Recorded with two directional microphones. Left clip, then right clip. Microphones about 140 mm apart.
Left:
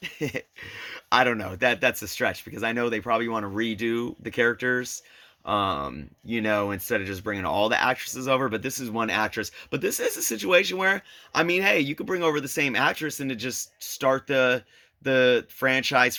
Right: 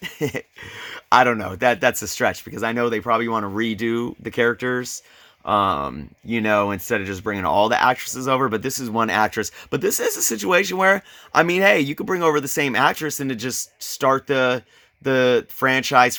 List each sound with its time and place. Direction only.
0.0 s a sound: 40° right (ahead or behind)
0.6 s speech: 35° right (ahead or behind)
6.9 s speech: 30° right (ahead or behind)